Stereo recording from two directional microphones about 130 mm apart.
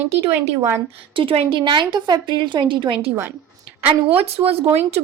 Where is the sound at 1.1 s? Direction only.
45° right (ahead or behind).